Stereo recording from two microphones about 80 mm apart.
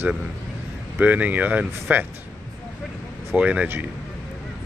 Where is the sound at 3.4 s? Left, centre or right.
Centre.